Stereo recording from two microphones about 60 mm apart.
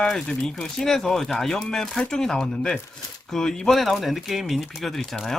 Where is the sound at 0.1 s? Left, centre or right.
Centre.